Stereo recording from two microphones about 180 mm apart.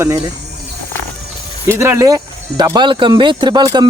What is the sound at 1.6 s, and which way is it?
Speech, 15° right (ahead or behind).